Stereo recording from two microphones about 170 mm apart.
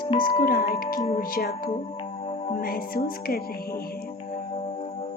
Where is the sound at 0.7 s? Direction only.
60° left (ahead or behind).